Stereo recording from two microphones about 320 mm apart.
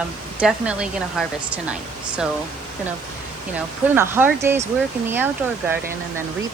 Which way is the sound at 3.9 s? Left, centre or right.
Centre.